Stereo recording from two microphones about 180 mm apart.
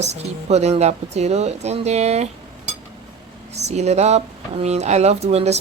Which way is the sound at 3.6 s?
40° right (ahead or behind).